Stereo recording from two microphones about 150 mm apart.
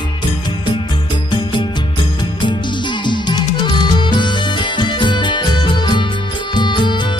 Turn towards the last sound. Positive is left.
turn(degrees=30)  # may be behind; listen again after turning